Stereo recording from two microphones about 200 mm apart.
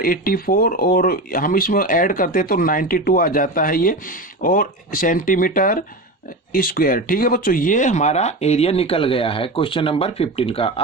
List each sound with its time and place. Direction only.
0.0 s speech: 45° left (ahead or behind); by 10.7 s 30° left (ahead or behind)